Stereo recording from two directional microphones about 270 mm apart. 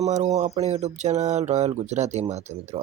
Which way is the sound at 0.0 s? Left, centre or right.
Right.